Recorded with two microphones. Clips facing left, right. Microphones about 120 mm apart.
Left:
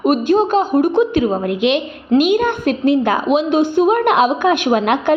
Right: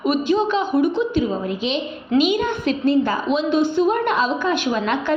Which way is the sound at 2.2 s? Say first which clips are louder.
Left 4 dB; 50° left (ahead or behind).